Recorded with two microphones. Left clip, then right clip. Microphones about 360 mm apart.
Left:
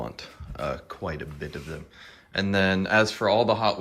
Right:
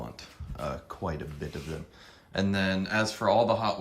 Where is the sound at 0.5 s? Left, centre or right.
Centre.